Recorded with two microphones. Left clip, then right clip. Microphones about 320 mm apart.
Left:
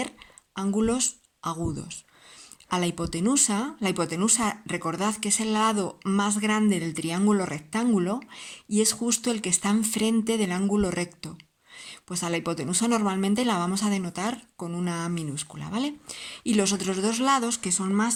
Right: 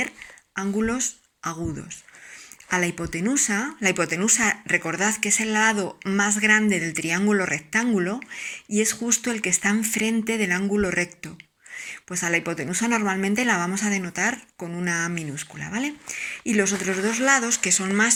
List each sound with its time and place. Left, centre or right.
0.5 s speech: left